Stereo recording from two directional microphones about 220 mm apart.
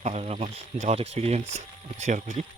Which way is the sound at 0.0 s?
30° right (ahead or behind).